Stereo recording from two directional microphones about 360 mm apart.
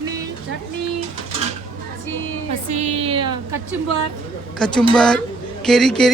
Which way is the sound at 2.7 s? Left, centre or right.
Centre.